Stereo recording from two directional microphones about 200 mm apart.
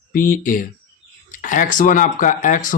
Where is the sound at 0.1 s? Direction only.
45° left (ahead or behind).